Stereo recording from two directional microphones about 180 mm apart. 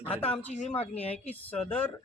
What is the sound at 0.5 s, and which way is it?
Speech, 40° left (ahead or behind).